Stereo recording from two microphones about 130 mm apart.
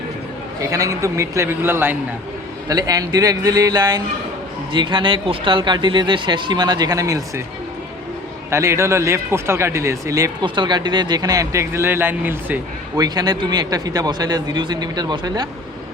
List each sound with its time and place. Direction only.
0.6 s speech: 25° right (ahead or behind)
2.6 s speech: 30° right (ahead or behind)
8.4 s speech: 20° right (ahead or behind)
10.4 s speech: 35° right (ahead or behind); by 12.5 s 15° right (ahead or behind)
13.0 s speech: 30° right (ahead or behind)